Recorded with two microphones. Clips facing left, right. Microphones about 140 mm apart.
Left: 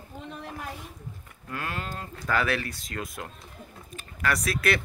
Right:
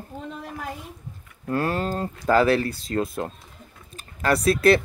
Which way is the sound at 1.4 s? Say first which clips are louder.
Right 10 dB; 35° right (ahead or behind).